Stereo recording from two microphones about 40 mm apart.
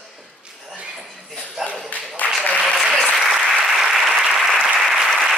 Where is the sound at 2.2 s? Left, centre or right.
Left.